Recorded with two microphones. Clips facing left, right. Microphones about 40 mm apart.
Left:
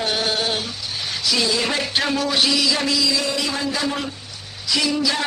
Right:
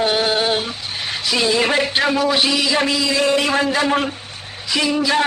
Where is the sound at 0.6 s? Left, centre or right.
Right.